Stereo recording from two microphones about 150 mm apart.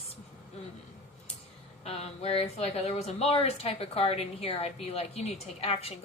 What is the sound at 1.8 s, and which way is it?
Speech, 40° left (ahead or behind).